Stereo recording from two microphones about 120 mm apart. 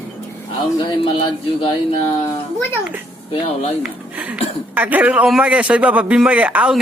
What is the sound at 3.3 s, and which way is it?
Speech, 60° left (ahead or behind).